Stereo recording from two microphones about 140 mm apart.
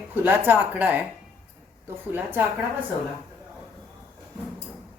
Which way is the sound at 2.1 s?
15° right (ahead or behind).